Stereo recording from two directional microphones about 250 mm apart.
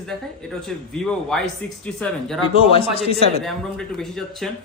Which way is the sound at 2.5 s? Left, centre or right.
Left.